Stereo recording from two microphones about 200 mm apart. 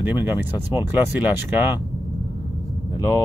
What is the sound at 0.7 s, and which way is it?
Speech, 10° right (ahead or behind).